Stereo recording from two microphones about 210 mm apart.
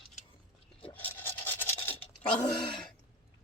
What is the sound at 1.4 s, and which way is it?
Scratch, 10° left (ahead or behind).